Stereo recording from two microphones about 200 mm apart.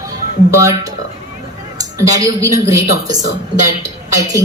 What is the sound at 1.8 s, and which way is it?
A woman's voice, 15° right (ahead or behind).